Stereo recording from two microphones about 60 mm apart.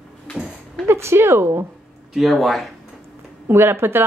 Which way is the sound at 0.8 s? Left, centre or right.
Right.